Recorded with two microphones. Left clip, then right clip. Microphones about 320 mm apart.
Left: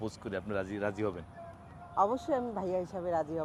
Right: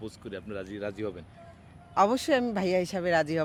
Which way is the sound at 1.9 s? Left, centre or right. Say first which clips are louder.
Right 6 dB; right.